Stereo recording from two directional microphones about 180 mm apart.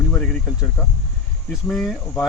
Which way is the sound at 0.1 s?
10° left (ahead or behind).